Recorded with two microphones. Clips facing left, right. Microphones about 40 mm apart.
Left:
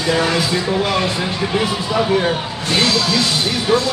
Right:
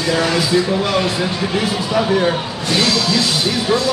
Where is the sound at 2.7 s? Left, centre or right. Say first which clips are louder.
Even; left.